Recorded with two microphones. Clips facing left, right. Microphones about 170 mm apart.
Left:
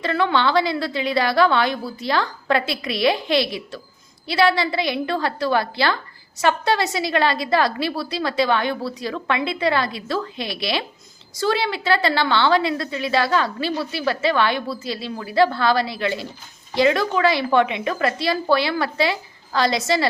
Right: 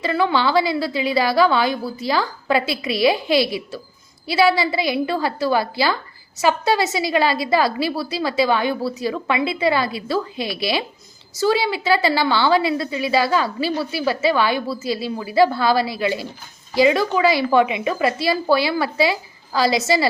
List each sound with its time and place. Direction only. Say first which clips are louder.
0.0 s a woman's voice: right 1 dB; 5° right (ahead or behind)